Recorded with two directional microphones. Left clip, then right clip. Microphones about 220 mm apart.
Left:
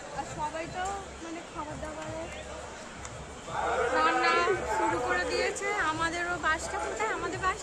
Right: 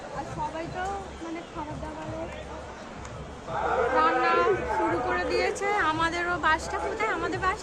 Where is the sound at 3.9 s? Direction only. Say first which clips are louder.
Right 2 dB; 25° left (ahead or behind).